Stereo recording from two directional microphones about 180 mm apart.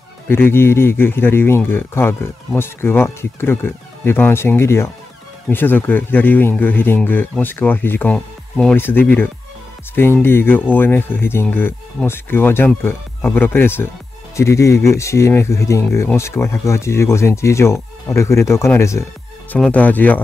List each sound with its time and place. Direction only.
0.3 s speech: 10° left (ahead or behind)